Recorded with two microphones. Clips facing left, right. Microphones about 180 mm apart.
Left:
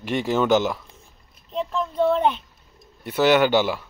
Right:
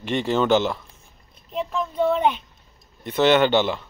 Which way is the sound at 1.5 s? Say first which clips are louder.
Even; 5° right (ahead or behind).